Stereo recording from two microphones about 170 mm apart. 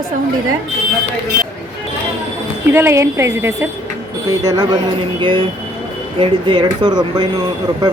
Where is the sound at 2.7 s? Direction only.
15° right (ahead or behind).